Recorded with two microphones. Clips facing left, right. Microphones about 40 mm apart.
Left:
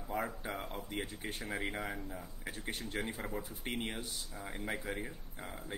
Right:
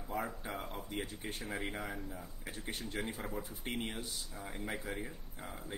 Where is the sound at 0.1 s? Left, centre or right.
Centre.